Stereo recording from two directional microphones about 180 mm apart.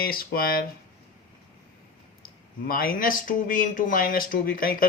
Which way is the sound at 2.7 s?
55° left (ahead or behind).